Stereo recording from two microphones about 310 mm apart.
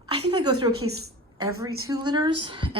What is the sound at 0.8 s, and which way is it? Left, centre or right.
Speech, right.